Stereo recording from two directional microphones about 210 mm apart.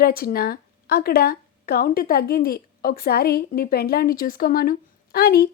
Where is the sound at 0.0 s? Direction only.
45° left (ahead or behind).